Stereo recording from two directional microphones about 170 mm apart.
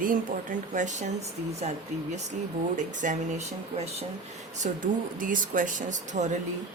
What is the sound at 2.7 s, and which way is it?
Speech, 45° right (ahead or behind).